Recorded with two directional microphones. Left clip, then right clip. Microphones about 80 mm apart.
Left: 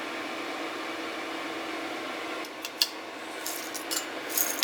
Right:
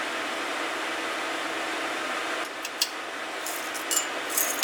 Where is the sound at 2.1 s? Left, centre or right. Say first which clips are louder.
Right 5 dB; right.